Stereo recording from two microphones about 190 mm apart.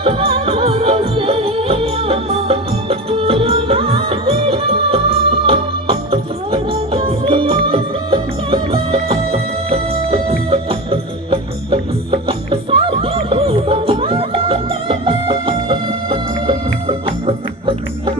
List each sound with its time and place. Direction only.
0.0 s music: 30° right (ahead or behind)